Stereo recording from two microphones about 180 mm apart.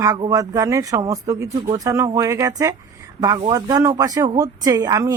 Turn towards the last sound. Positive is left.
turn(degrees=-20)  # may be behind; listen again after turning